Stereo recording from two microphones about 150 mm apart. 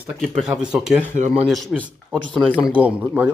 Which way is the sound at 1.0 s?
50° right (ahead or behind).